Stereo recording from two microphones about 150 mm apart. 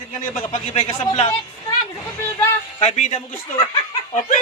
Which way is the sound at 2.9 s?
50° left (ahead or behind).